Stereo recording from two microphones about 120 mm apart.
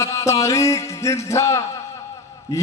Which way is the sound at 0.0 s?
25° left (ahead or behind).